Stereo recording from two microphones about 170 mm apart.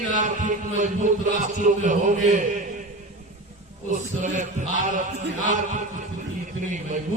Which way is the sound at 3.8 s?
45° right (ahead or behind).